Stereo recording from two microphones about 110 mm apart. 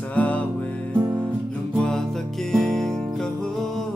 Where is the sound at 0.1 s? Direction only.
15° left (ahead or behind).